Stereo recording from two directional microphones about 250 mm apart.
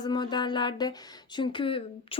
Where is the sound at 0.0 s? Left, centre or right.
Centre.